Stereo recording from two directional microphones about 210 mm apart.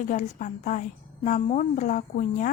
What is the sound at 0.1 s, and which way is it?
A woman's voice, 35° left (ahead or behind).